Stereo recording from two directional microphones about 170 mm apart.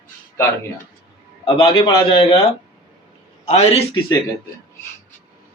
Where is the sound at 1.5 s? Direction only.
35° left (ahead or behind).